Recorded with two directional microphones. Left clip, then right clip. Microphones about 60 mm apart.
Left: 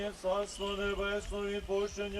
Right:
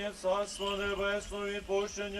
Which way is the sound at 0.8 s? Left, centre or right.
Right.